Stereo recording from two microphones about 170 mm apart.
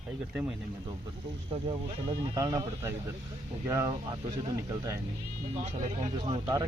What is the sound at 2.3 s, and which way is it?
Speech, 20° right (ahead or behind).